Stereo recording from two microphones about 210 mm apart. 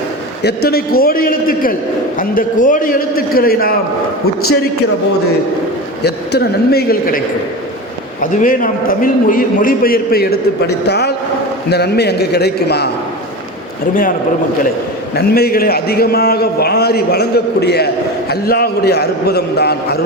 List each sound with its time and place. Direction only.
0.4 s a man's voice: 50° left (ahead or behind)
6.0 s a man's voice: 50° left (ahead or behind)
8.2 s a man's voice: 40° left (ahead or behind)
15.1 s a man's voice: 50° left (ahead or behind)